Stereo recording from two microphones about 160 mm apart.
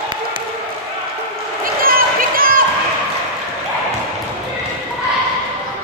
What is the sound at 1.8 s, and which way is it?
Run, 65° right (ahead or behind).